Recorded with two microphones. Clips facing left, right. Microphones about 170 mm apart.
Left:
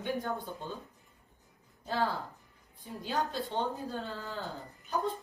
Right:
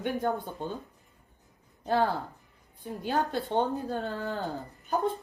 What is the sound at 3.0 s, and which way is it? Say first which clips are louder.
Speech: right 4 dB; 60° right (ahead or behind).